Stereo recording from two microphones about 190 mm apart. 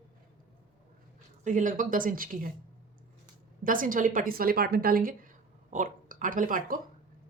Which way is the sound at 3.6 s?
45° right (ahead or behind).